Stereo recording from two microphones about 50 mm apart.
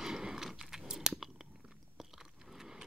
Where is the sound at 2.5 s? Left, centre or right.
Centre.